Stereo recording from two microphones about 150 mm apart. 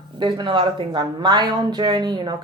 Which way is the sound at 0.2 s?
30° right (ahead or behind).